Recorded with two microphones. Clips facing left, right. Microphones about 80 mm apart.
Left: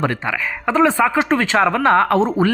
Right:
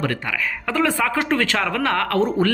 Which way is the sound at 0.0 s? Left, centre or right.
Left.